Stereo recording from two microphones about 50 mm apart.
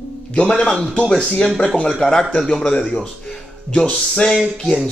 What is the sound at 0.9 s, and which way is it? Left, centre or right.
Speech, centre.